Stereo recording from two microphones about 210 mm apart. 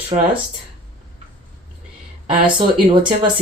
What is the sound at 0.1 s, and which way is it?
Speech, 30° right (ahead or behind).